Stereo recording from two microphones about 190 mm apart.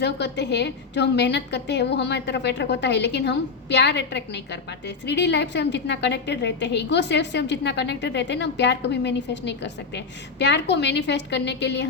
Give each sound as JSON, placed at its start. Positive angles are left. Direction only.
{"t": 0.0, "sound": "a woman's voice", "side_deg": 65}